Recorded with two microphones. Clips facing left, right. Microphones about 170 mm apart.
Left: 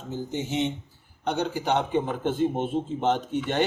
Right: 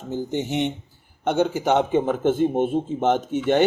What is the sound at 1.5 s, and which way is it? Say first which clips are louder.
Speech: right 5 dB; 20° right (ahead or behind).